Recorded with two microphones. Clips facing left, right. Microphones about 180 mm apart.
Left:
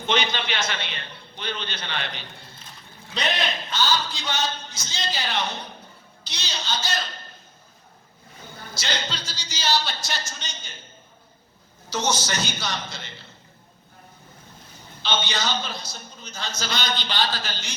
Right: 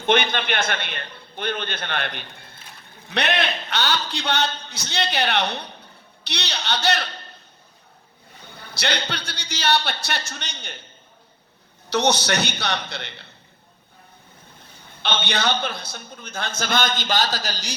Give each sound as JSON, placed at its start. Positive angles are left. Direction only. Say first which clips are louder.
{"t": 0.0, "sound": "a man's voice", "louder": "right 4 dB", "side_deg": -55}
{"t": 8.5, "sound": "a man's voice", "louder": "right 4 dB", "side_deg": -65}
{"t": 11.9, "sound": "a man's voice", "louder": "right 5 dB", "side_deg": -65}
{"t": 15.0, "sound": "a man's voice", "louder": "right 3 dB", "side_deg": -60}